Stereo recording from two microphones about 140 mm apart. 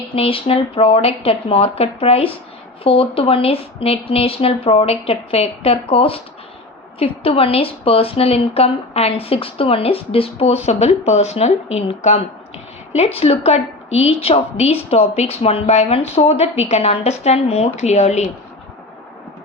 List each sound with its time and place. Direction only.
0.2 s speech: 40° left (ahead or behind)